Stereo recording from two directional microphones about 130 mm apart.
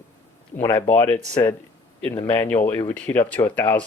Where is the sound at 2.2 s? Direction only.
15° left (ahead or behind).